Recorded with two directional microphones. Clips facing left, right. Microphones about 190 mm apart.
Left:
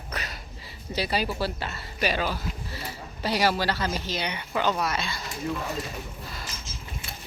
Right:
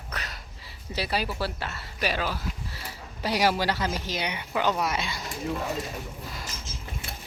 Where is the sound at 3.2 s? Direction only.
15° right (ahead or behind).